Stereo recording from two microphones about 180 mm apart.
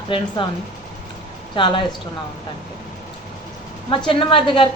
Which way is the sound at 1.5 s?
25° left (ahead or behind).